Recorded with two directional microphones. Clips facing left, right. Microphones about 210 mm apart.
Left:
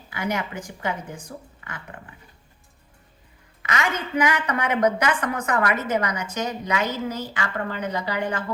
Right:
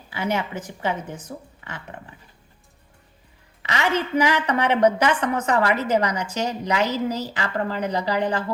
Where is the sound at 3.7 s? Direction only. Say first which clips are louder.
Right 3 dB; 30° right (ahead or behind).